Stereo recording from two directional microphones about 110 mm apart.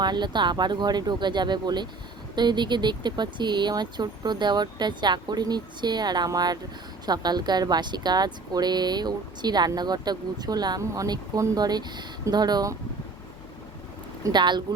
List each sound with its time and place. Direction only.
0.0 s speech: 40° right (ahead or behind)
14.3 s speech: 45° right (ahead or behind)